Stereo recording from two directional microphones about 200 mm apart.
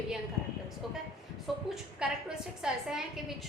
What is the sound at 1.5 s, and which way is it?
A woman's voice, centre (ahead or behind).